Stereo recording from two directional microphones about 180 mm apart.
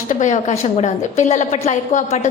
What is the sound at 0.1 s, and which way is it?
A woman's voice, 45° left (ahead or behind).